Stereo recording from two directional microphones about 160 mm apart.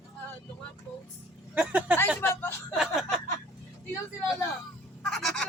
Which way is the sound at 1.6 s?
10° right (ahead or behind).